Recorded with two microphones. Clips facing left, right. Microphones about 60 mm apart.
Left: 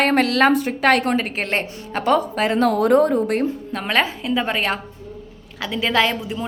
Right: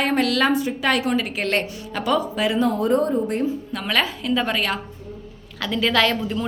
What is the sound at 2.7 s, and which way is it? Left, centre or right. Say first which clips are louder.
Speech: left 4 dB; left.